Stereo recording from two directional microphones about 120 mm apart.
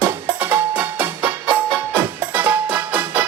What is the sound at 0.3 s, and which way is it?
Music, 15° right (ahead or behind).